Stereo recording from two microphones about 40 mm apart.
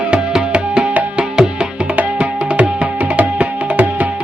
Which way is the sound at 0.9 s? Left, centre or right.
Right.